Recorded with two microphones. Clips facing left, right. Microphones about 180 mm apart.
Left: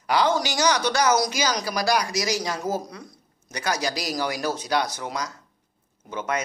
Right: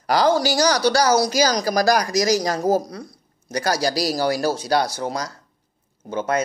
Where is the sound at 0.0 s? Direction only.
40° right (ahead or behind).